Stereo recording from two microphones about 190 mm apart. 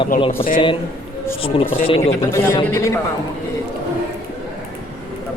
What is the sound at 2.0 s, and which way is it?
A man's voice, 15° left (ahead or behind).